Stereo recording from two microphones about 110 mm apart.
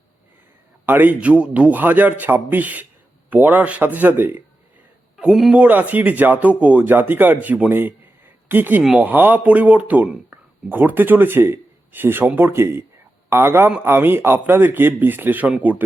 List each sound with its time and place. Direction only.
0.9 s speech: 15° right (ahead or behind)
5.1 s a man's voice: 5° right (ahead or behind)